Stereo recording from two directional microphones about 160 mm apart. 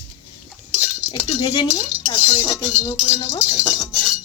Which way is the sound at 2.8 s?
30° left (ahead or behind).